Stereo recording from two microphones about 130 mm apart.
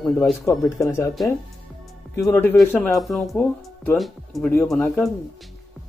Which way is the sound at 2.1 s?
20° left (ahead or behind).